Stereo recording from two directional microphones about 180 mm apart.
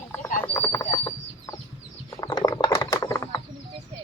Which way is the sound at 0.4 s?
15° left (ahead or behind).